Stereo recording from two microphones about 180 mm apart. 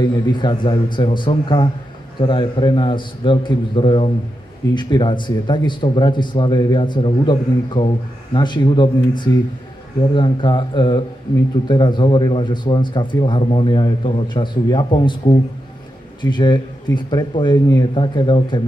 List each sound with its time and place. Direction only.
0.0 s speech: 25° left (ahead or behind)